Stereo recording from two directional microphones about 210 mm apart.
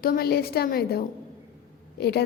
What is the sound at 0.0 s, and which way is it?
A woman's voice, 45° left (ahead or behind).